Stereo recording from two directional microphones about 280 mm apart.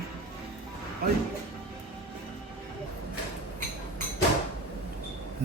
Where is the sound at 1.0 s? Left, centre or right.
Right.